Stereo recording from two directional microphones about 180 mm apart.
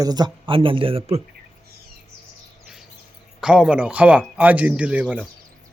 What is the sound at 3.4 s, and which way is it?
Speech, 5° right (ahead or behind).